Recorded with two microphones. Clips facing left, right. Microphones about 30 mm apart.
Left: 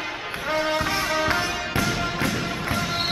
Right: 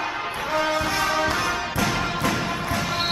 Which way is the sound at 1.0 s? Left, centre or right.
Centre.